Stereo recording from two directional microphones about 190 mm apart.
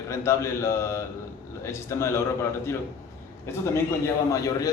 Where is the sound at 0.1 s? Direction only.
15° left (ahead or behind).